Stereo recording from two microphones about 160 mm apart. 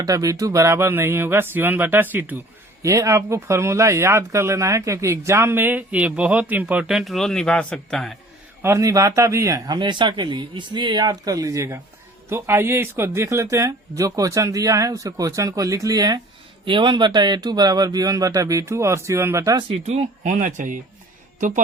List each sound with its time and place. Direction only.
0.0 s speech: 20° right (ahead or behind); by 8.2 s centre (ahead or behind)
8.6 s speech: 20° right (ahead or behind)
19.7 s speech: 40° right (ahead or behind)